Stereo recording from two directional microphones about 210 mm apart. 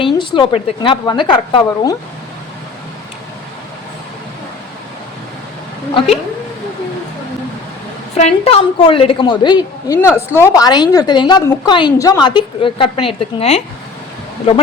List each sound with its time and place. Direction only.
0.0 s a woman's voice: 25° left (ahead or behind)
8.1 s a woman's voice: 30° left (ahead or behind)